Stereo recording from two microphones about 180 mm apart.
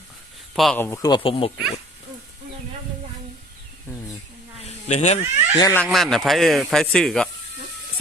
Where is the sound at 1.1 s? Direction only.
30° left (ahead or behind).